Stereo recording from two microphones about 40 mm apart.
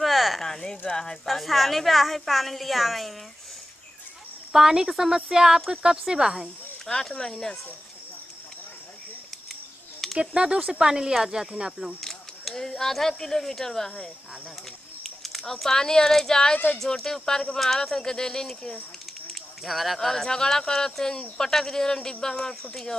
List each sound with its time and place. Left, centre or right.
0.0 s a sound: centre
0.4 s a sound: centre
1.2 s a woman's voice: centre
4.5 s speech: centre
6.9 s speech: centre
10.1 s speech: right
12.0 s speech: centre
15.0 s speech: centre
19.6 s a woman's voice: centre; by 22.7 s left